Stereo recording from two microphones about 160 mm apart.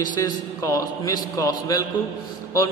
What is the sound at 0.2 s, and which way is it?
A man's voice, 20° left (ahead or behind).